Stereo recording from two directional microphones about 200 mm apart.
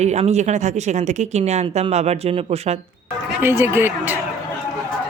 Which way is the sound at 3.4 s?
10° right (ahead or behind).